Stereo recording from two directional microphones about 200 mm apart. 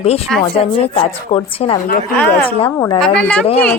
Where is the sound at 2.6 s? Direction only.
25° left (ahead or behind).